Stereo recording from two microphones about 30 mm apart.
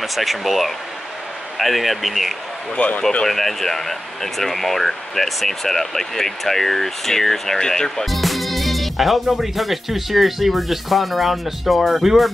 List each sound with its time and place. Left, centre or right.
0.0 s speech: centre
2.8 s speech: left
3.3 s speech: centre
8.0 s speech: centre